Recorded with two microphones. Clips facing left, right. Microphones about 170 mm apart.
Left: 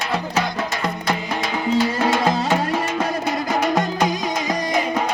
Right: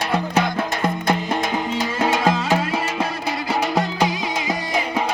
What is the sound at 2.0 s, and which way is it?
Music, 15° right (ahead or behind).